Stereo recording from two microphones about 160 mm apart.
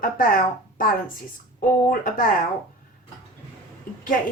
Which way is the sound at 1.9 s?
60° left (ahead or behind).